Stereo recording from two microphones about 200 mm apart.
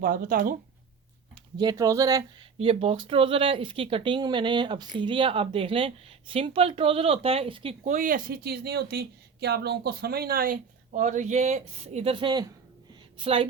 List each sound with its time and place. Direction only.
0.0 s speech: 50° right (ahead or behind)
1.5 s speech: 20° right (ahead or behind)